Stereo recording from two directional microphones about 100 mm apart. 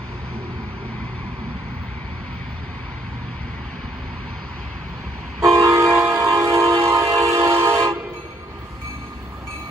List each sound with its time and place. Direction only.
5.6 s train: 30° right (ahead or behind)